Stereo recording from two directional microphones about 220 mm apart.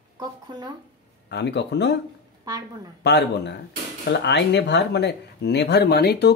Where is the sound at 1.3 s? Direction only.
50° left (ahead or behind).